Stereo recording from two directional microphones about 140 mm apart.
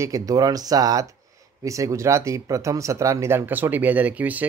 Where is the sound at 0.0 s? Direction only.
25° right (ahead or behind).